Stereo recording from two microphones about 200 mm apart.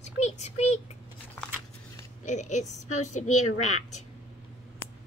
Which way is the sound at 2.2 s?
35° left (ahead or behind).